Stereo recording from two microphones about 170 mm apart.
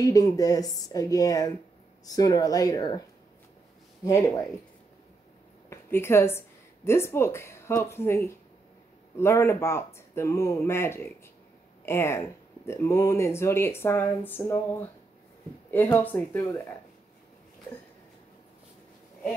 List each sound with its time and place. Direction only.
0.0 s a woman's voice: 20° left (ahead or behind)
4.0 s speech: 15° left (ahead or behind)
5.7 s a woman's voice: 15° left (ahead or behind)